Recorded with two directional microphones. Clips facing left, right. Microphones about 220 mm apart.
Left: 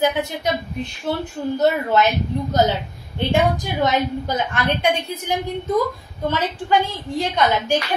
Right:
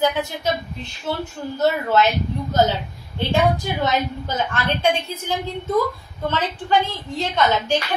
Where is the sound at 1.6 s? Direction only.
15° left (ahead or behind).